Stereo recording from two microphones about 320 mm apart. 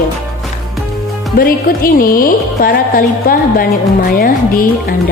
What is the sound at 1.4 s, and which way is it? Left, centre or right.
Speech, left.